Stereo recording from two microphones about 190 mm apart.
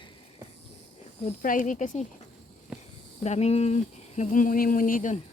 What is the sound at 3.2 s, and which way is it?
Speech, 35° left (ahead or behind).